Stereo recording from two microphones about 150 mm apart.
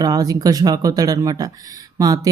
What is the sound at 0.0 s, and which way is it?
Speech, 25° right (ahead or behind).